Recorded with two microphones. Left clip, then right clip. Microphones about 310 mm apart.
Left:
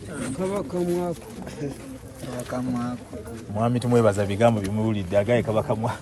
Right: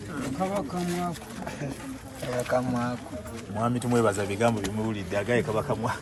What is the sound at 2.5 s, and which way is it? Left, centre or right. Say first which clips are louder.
Speech: right 2 dB; right.